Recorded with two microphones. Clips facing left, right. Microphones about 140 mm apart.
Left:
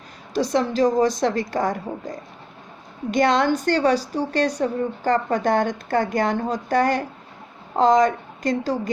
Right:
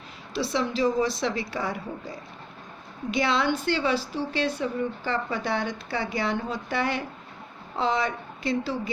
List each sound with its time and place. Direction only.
0.3 s speech: 45° left (ahead or behind)